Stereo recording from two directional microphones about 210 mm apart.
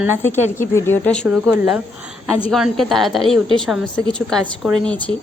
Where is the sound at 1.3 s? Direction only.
5° right (ahead or behind).